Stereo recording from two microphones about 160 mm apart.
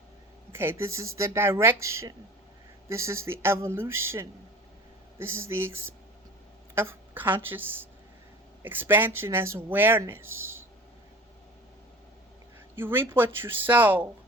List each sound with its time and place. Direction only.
0.5 s speech: 15° right (ahead or behind)
12.8 s speech: 15° right (ahead or behind)